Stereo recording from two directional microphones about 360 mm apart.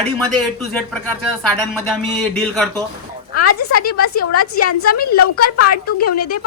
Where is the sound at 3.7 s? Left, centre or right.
Left.